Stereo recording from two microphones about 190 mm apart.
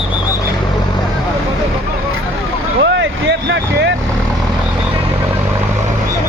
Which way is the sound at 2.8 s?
70° right (ahead or behind).